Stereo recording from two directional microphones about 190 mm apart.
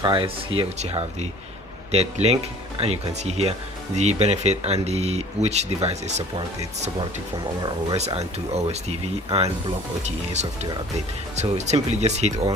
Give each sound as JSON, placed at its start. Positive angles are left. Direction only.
{"t": 0.0, "sound": "speech", "side_deg": -25}
{"t": 7.9, "sound": "speech", "side_deg": -35}